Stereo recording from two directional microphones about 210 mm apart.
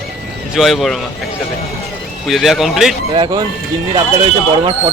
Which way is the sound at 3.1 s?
20° right (ahead or behind).